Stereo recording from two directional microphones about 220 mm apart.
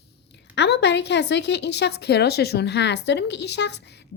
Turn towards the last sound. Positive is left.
turn(degrees=50)  # may be behind; listen again after turning